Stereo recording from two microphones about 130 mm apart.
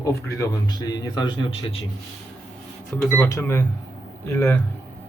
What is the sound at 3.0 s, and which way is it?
Speech, 15° left (ahead or behind).